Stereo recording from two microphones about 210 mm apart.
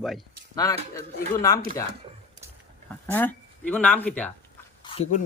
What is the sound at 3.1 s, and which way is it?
Speech, 10° left (ahead or behind).